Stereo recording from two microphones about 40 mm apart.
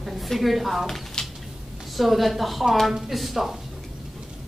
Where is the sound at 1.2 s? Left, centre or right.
Centre.